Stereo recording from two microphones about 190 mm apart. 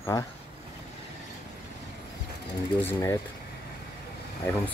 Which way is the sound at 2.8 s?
10° left (ahead or behind).